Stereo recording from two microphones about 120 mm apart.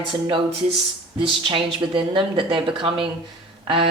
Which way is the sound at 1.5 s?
45° right (ahead or behind).